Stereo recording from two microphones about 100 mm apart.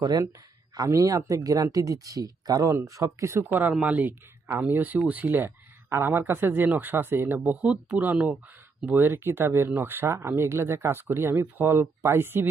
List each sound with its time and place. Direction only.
0.0 s speech: 40° right (ahead or behind)
3.6 s speech: 15° right (ahead or behind)